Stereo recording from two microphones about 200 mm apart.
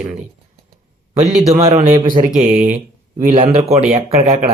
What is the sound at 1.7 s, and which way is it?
Speech, 35° right (ahead or behind).